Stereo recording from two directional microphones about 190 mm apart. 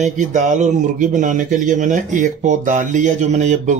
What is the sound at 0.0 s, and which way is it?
A man's voice, 40° right (ahead or behind).